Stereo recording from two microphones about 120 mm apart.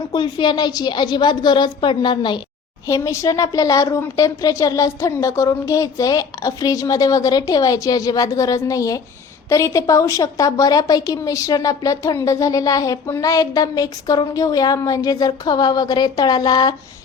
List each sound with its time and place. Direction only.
0.1 s a woman's voice: 40° left (ahead or behind)
2.8 s a woman's voice: 25° left (ahead or behind)